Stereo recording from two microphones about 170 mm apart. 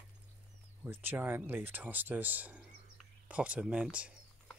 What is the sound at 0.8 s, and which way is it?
Speech, 10° right (ahead or behind).